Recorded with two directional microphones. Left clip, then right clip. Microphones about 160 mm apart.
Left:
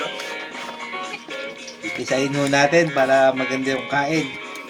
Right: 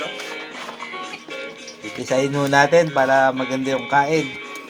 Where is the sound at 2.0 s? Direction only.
75° right (ahead or behind).